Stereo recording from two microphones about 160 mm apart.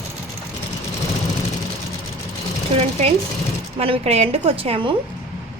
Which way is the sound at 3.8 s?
40° right (ahead or behind).